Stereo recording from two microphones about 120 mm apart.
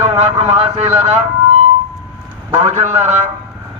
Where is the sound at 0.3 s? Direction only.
60° right (ahead or behind).